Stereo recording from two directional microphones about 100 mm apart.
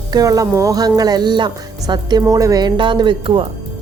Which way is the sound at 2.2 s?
35° right (ahead or behind).